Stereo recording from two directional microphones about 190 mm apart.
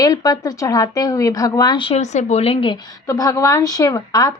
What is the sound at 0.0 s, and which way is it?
Speech, 20° left (ahead or behind).